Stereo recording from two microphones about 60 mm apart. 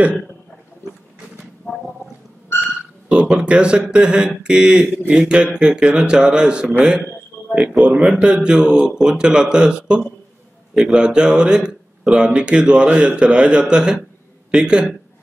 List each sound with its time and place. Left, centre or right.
3.1 s a man's voice: centre